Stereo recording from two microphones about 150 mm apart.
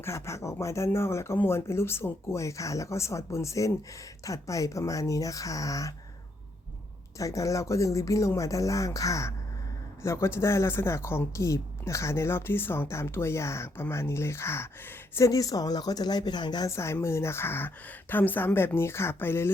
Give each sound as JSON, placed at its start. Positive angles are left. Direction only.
{"t": 0.0, "sound": "speech", "side_deg": 20}
{"t": 7.2, "sound": "a woman's voice", "side_deg": 20}